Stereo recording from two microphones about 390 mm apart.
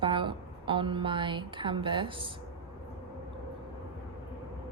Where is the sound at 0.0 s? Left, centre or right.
Centre.